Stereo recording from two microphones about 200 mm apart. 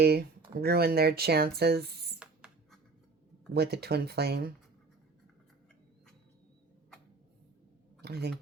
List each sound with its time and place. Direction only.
0.0 s speech: 50° right (ahead or behind)
2.1 s a sound: 5° right (ahead or behind)
3.5 s speech: 55° right (ahead or behind)
8.0 s speech: 55° right (ahead or behind)